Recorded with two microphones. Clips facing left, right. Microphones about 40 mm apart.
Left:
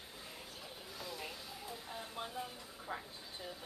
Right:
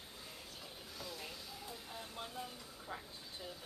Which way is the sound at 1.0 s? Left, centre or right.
Centre.